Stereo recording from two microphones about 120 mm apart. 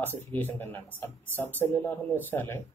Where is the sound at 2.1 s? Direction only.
15° left (ahead or behind).